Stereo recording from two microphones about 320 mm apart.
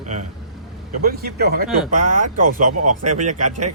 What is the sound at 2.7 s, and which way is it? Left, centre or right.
Speech, right.